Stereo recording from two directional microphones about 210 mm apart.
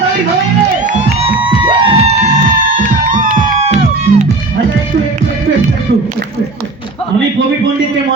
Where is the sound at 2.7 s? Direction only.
40° right (ahead or behind).